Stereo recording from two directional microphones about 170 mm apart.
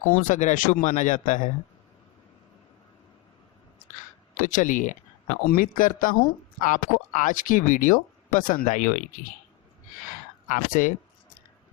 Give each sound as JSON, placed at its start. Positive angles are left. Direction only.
{"t": 0.1, "sound": "speech", "side_deg": 50}
{"t": 4.4, "sound": "speech", "side_deg": 50}
{"t": 10.5, "sound": "speech", "side_deg": 50}